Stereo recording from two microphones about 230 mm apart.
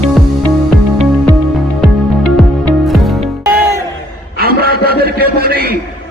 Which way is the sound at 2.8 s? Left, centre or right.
Centre.